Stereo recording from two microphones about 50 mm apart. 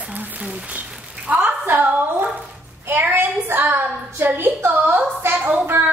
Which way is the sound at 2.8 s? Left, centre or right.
Right.